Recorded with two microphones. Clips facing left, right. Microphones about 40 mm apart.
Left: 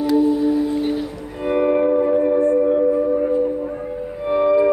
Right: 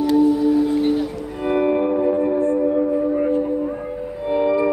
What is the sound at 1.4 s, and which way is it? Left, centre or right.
Music, centre.